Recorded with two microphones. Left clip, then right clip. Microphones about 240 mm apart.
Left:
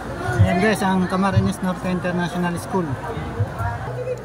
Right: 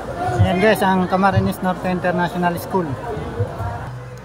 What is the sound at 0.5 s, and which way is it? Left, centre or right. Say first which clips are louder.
Speech: right 4 dB; centre.